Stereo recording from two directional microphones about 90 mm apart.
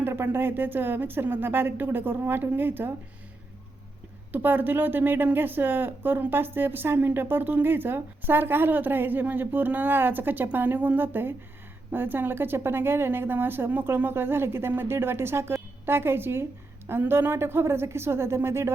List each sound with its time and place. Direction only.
0.0 s speech: 25° right (ahead or behind)
4.3 s speech: 20° right (ahead or behind)